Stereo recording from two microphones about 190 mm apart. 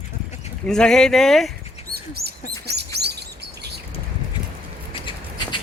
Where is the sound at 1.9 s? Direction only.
55° right (ahead or behind).